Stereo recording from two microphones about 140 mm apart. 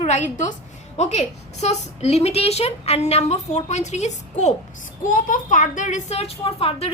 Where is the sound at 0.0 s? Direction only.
55° left (ahead or behind).